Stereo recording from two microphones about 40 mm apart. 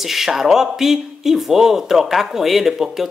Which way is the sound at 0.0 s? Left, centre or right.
Centre.